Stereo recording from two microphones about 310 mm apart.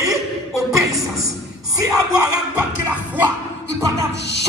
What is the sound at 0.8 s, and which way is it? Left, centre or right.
Speech, centre.